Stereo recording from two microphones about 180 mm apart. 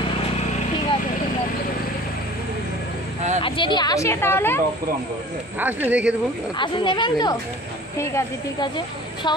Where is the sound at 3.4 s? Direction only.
30° left (ahead or behind); by 4.6 s 10° left (ahead or behind).